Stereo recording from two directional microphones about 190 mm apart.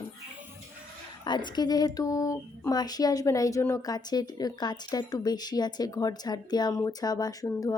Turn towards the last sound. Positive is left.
turn(degrees=15)  # may be behind; listen again after turning